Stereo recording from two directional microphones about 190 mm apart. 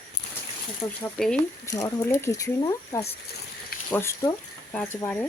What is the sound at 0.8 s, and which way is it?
Speech, 15° left (ahead or behind).